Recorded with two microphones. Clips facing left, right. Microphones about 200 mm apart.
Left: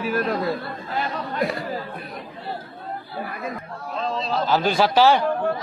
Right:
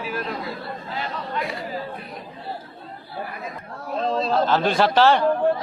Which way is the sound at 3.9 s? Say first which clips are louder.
Right 4 dB; 50° right (ahead or behind).